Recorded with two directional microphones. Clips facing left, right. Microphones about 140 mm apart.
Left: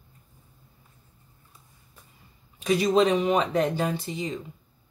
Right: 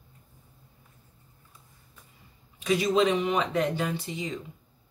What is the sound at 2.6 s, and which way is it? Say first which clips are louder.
Speech: left 2 dB; 40° left (ahead or behind).